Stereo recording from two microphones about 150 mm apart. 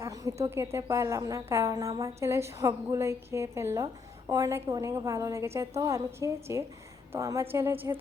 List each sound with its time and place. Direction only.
0.0 s a woman's voice: 20° right (ahead or behind)